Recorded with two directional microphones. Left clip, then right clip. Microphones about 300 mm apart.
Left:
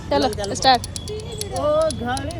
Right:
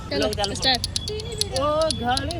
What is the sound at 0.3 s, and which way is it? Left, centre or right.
Speech, centre.